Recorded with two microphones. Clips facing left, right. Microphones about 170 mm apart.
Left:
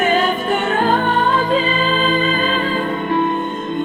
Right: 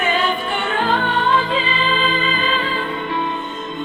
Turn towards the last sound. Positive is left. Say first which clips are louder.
# left 6 dB
turn(degrees=50)  # may be behind; listen again after turning